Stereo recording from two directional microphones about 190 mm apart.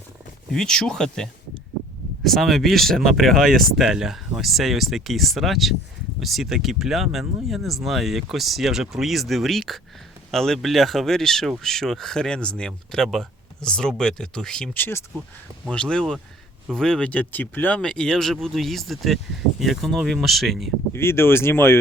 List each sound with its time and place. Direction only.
0.5 s speech: 5° left (ahead or behind)
20.9 s speech: 15° left (ahead or behind)